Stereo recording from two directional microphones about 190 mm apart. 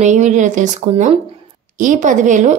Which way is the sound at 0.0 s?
40° right (ahead or behind).